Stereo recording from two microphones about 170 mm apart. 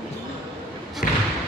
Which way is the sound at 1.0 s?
55° left (ahead or behind).